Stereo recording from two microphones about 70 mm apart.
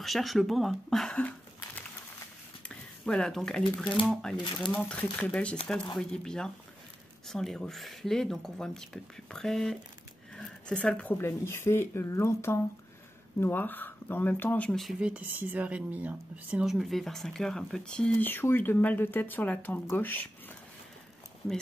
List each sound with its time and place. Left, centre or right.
0.0 s speech: centre
2.7 s a sound: centre
3.8 s speech: centre
4.7 s speech: centre
10.3 s a sound: centre
11.1 s speech: left
13.4 s speech: left
14.7 s speech: centre
15.0 s speech: centre
16.6 s speech: centre
18.2 s speech: left